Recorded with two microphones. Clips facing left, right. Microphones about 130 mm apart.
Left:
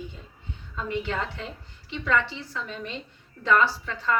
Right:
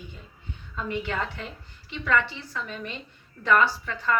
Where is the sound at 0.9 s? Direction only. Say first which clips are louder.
Left 1 dB; 25° left (ahead or behind).